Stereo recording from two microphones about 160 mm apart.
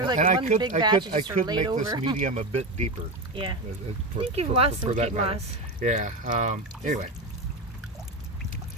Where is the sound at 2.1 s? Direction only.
45° right (ahead or behind).